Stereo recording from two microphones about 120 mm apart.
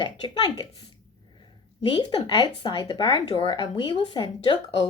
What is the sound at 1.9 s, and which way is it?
Speech, 35° left (ahead or behind).